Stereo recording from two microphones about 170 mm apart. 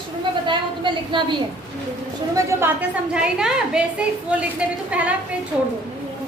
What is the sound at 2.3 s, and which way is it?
A woman's voice, 10° right (ahead or behind).